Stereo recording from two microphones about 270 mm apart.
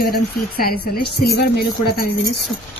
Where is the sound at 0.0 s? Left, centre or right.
Left.